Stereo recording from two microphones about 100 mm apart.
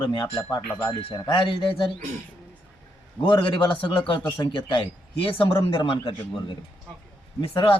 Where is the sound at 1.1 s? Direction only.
55° left (ahead or behind).